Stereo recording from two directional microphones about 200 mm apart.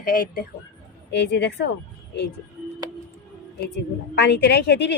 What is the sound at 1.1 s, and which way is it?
Speech, 60° left (ahead or behind).